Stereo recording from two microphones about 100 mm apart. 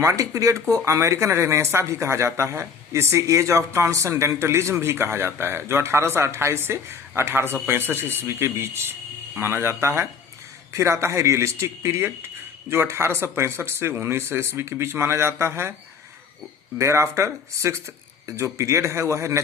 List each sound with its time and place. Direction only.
0.0 s speech: 30° right (ahead or behind)
16.7 s speech: 30° right (ahead or behind)